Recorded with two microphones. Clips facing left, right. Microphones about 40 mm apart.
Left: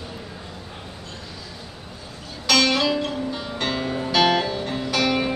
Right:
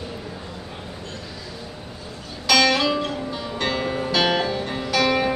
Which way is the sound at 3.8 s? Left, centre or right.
Right.